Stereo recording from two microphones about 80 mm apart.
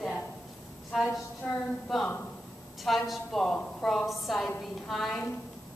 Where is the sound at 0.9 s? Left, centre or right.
Centre.